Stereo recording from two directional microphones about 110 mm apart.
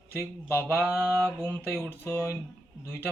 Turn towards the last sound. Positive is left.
turn(degrees=20)  # may be behind; listen again after turning